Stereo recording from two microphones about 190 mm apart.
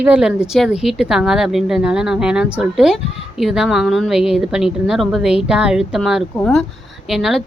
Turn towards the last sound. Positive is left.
turn(degrees=0)  # may be behind; listen again after turning